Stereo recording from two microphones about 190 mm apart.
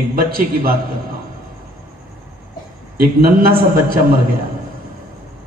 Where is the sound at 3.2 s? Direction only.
50° right (ahead or behind).